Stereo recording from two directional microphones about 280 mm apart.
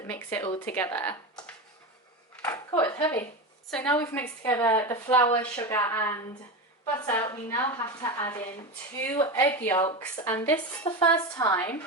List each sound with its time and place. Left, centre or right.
0.1 s a woman's voice: centre
2.3 s a sound: centre
2.7 s a woman's voice: centre